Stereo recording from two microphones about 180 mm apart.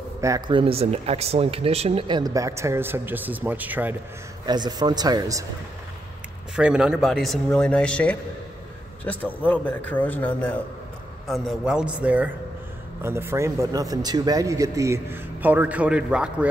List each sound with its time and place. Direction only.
0.2 s speech: 20° right (ahead or behind)
4.5 s speech: 20° right (ahead or behind)
6.5 s a man's voice: 5° right (ahead or behind)